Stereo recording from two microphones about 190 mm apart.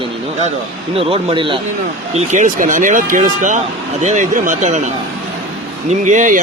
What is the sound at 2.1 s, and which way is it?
Speech, 40° right (ahead or behind).